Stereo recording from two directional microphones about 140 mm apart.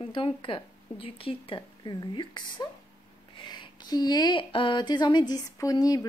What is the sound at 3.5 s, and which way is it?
Speech, 30° left (ahead or behind).